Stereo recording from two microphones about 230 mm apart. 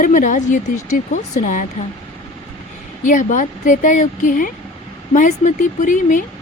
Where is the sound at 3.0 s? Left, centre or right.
Left.